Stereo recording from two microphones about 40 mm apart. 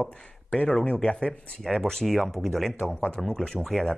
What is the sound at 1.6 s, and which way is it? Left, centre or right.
Speech, centre.